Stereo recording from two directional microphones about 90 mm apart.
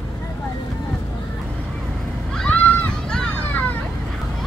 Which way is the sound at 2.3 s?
10° left (ahead or behind).